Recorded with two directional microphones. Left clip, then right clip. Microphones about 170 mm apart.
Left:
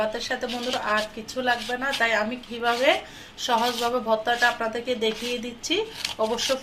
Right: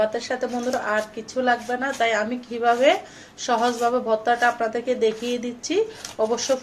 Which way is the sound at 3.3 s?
30° right (ahead or behind).